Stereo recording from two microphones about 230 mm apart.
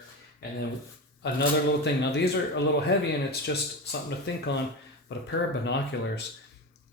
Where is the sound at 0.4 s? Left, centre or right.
Left.